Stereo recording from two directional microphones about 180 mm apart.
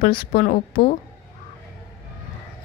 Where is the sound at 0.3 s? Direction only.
50° left (ahead or behind).